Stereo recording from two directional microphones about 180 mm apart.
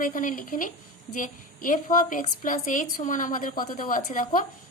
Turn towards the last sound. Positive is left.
turn(degrees=45)  # may be behind; listen again after turning